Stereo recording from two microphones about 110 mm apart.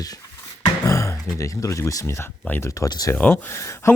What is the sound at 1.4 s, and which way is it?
Speech, 30° left (ahead or behind).